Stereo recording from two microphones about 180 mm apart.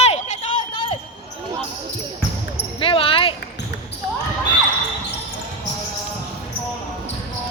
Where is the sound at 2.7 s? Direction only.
30° left (ahead or behind).